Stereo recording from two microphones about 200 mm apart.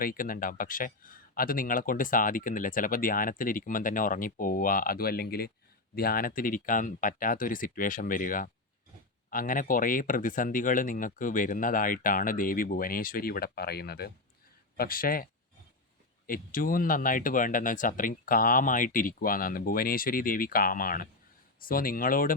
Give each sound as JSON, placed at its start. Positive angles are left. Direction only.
{"t": 0.0, "sound": "speech", "side_deg": 45}